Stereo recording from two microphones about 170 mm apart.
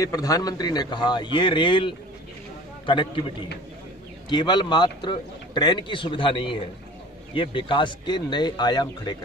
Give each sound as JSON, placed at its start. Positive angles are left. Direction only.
{"t": 0.0, "sound": "a man's voice", "side_deg": 20}